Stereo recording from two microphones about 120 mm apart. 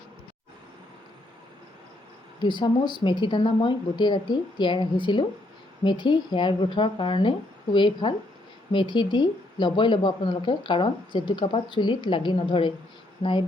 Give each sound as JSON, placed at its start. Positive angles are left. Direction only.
{"t": 2.4, "sound": "a woman's voice", "side_deg": 40}